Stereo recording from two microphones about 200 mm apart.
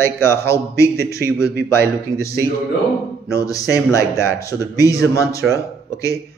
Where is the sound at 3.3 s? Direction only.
15° left (ahead or behind).